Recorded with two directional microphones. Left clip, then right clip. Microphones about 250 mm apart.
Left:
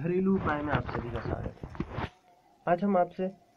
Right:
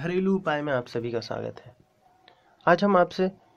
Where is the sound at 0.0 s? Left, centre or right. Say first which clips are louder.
Right 3 dB; right.